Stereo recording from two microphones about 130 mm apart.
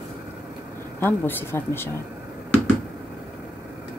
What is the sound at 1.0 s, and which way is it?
Speech, 15° left (ahead or behind).